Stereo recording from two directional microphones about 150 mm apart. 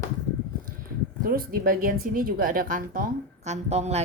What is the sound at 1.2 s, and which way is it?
Speech, 75° right (ahead or behind).